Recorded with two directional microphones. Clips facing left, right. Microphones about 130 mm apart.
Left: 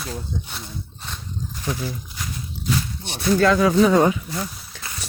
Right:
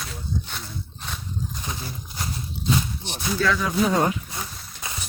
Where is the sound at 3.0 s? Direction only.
60° left (ahead or behind); by 3.9 s 85° left.